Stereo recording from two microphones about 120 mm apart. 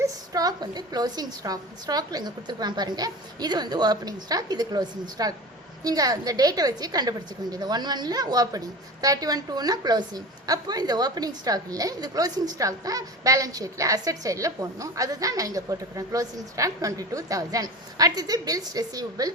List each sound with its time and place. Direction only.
0.0 s a woman's voice: 30° right (ahead or behind)